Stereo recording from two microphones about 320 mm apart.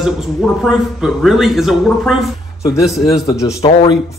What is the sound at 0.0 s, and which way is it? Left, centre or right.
A man's voice, centre.